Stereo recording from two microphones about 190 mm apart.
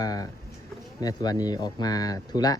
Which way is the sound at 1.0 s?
20° left (ahead or behind).